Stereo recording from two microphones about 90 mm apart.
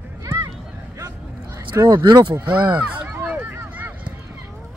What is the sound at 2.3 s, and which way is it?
Speech, 15° right (ahead or behind).